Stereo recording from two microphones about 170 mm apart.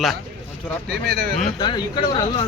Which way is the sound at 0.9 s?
70° right (ahead or behind).